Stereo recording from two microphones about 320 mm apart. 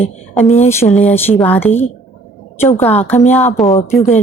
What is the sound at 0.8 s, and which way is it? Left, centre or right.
Speech, centre.